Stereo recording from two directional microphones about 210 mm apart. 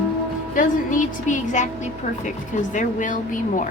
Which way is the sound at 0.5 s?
40° left (ahead or behind).